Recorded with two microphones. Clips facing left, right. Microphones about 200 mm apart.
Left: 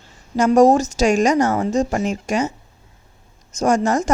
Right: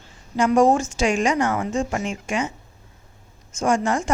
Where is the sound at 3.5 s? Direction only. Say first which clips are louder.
Left 4 dB; 40° left (ahead or behind).